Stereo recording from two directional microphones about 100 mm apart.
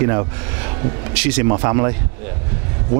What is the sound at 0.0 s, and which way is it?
Speech, 25° right (ahead or behind).